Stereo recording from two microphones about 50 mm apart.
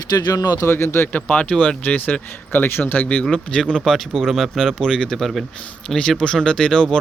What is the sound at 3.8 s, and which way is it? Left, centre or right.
Speech, centre.